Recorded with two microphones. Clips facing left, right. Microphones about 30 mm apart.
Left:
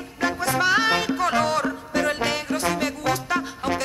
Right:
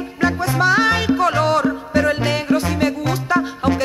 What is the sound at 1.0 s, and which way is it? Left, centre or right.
Music, centre.